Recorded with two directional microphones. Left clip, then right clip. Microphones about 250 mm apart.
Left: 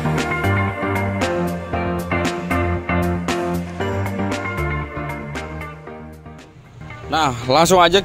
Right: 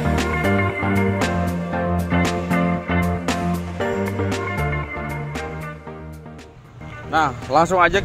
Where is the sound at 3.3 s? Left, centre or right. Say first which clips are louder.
Left 2 dB; centre.